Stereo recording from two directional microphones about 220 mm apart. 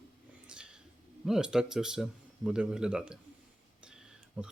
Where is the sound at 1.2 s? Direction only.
5° right (ahead or behind).